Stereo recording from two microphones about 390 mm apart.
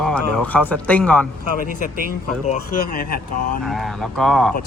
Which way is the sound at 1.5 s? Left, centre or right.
Left.